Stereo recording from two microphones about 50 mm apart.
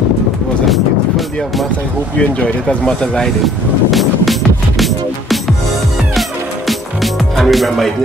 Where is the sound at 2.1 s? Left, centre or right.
Left.